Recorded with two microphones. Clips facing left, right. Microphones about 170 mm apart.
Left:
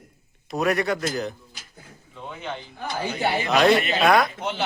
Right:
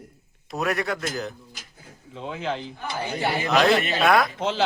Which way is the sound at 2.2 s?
90° right.